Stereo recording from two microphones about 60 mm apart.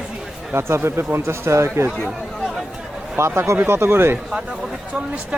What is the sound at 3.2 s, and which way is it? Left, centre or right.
Speech, right.